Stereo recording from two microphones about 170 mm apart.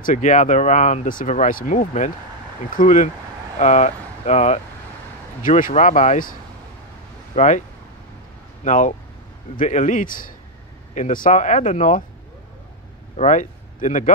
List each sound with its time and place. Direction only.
0.0 s speech: 45° left (ahead or behind)
7.3 s speech: 45° left (ahead or behind)
8.6 s speech: 50° left (ahead or behind)
13.1 s speech: 45° left (ahead or behind)